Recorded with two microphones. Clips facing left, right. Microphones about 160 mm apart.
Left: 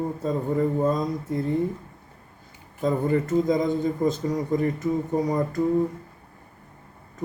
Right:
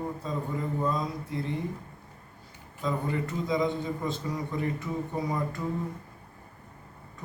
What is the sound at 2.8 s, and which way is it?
Speech, 45° left (ahead or behind).